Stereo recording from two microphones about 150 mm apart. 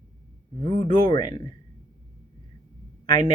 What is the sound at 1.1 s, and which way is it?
Speech, 30° left (ahead or behind).